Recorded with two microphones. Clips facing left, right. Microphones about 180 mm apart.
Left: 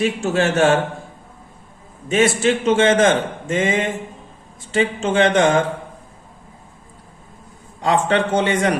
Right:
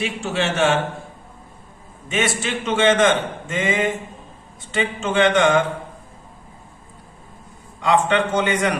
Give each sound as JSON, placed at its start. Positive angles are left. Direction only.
{"t": 0.0, "sound": "a man's voice", "side_deg": 45}
{"t": 2.0, "sound": "a man's voice", "side_deg": 35}
{"t": 7.8, "sound": "a man's voice", "side_deg": 35}